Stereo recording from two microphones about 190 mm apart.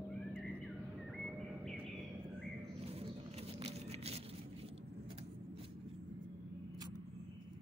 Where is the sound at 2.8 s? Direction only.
30° right (ahead or behind).